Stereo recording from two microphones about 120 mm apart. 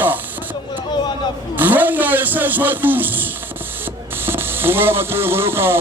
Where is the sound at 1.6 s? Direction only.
15° right (ahead or behind).